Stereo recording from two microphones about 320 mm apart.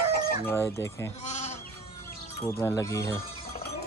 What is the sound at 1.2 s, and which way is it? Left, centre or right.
Goat, left.